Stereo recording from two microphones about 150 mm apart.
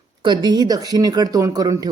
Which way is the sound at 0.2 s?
30° right (ahead or behind).